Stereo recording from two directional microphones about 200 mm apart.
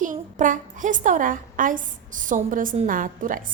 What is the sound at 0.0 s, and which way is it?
A woman's voice, 40° right (ahead or behind).